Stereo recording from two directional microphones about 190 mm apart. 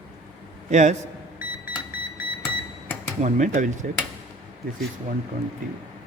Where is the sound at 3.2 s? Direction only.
40° right (ahead or behind).